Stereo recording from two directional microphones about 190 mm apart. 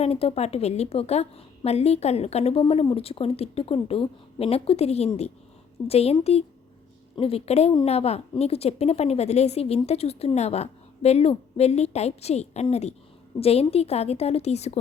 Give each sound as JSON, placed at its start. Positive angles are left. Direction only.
{"t": 0.0, "sound": "a woman's voice", "side_deg": 30}